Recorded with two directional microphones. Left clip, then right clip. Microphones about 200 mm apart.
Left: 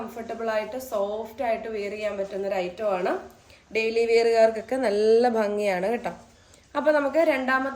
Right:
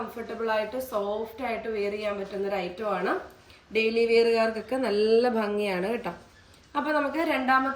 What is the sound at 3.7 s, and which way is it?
Speech, 35° left (ahead or behind).